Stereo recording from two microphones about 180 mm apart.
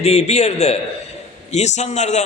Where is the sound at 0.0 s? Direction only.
35° left (ahead or behind).